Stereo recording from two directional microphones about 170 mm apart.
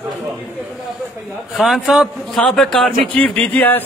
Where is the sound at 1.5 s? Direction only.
Centre (ahead or behind).